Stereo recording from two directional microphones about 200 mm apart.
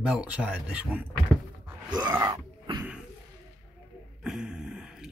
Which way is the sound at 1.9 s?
20° right (ahead or behind).